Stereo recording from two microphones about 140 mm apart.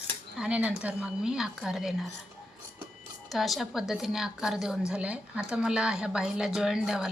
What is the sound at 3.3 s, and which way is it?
A woman's voice, centre (ahead or behind).